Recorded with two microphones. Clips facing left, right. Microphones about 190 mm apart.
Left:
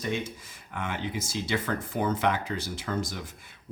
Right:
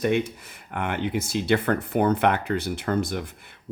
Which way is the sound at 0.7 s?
60° right (ahead or behind).